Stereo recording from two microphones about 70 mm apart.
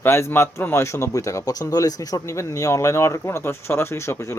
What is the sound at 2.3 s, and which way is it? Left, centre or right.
Speech, left.